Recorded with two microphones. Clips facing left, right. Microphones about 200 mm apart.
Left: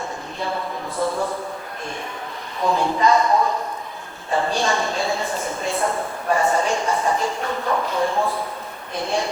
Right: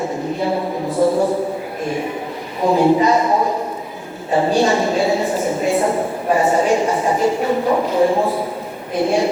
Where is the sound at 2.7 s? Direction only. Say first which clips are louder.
Right 6 dB; 10° right (ahead or behind).